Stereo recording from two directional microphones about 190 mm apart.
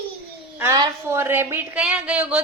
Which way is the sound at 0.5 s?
15° right (ahead or behind).